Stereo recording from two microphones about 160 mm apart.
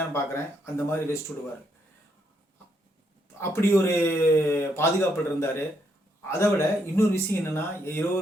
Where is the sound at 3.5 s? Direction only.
15° left (ahead or behind).